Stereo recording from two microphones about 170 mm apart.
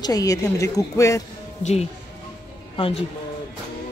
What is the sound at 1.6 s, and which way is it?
Speech, 40° left (ahead or behind).